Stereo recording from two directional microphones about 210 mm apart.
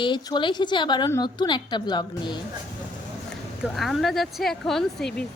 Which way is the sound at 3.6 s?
Centre (ahead or behind).